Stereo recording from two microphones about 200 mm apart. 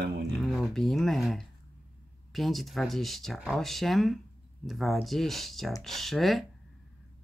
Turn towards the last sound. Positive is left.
turn(degrees=0)  # may be behind; listen again after turning